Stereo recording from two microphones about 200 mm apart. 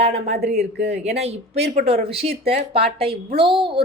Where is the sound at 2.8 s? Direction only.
30° right (ahead or behind).